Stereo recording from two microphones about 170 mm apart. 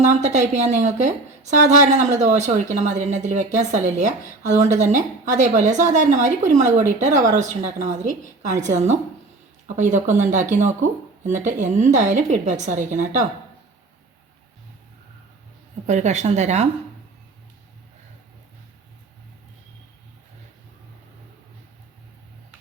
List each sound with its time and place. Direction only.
0.0 s a woman's voice: 45° right (ahead or behind)
15.9 s a woman's voice: 45° right (ahead or behind)